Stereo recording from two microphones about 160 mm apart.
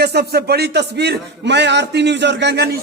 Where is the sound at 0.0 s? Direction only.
90° right.